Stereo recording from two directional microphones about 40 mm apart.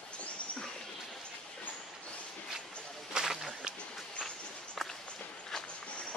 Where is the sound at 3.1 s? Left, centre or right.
Right.